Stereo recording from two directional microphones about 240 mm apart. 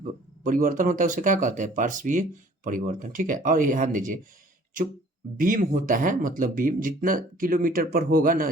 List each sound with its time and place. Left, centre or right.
0.4 s speech: right
5.4 s speech: right